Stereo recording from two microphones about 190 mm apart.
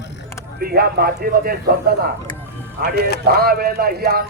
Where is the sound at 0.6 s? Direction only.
55° right (ahead or behind).